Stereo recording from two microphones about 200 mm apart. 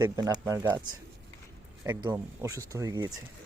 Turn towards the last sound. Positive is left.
turn(degrees=-20)  # may be behind; listen again after turning